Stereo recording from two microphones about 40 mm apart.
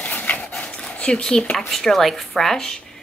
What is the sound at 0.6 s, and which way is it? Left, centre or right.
Dog, left.